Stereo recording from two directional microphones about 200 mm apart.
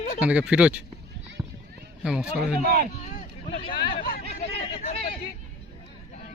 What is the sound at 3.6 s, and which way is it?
Hubbub, 25° left (ahead or behind).